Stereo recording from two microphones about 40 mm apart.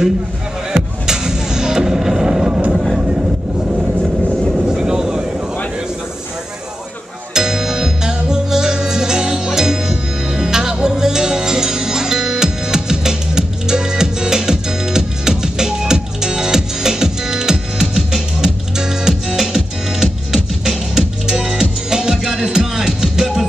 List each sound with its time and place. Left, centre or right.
0.7 s music: centre
2.7 s vehicle: centre
3.0 s vehicle: right
4.6 s vehicle: centre
7.3 s music: centre